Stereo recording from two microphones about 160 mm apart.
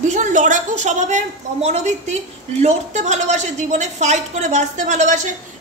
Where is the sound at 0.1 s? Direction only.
50° right (ahead or behind).